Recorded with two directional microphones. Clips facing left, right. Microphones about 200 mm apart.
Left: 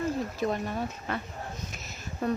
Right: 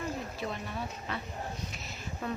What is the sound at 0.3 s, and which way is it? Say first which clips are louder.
Speech: left 7 dB; 45° left (ahead or behind).